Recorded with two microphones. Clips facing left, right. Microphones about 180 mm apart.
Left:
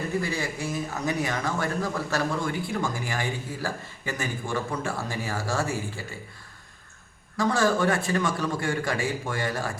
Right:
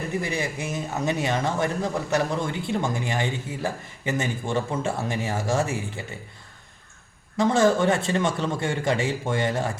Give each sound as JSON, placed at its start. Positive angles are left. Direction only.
{"t": 0.2, "sound": "speech", "side_deg": -20}
{"t": 7.3, "sound": "speech", "side_deg": -20}